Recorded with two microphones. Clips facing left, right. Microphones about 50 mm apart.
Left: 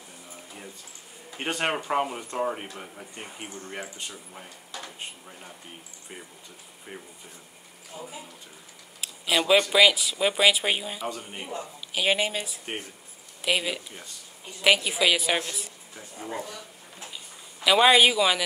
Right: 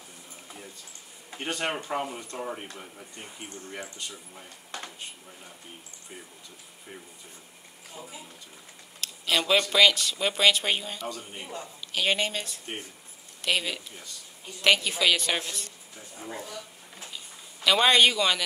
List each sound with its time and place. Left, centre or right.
1.4 s speech: left
3.8 s speech: centre
7.9 s speech: centre
11.1 s speech: left
17.0 s a sound: centre